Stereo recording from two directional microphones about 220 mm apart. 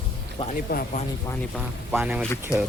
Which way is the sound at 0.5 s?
40° left (ahead or behind).